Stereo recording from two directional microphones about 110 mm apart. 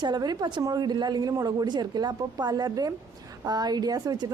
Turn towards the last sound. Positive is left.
turn(degrees=-35)  # may be behind; listen again after turning